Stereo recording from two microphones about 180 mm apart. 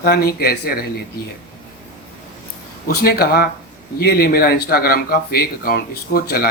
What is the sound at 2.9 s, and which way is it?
Speech, 60° left (ahead or behind).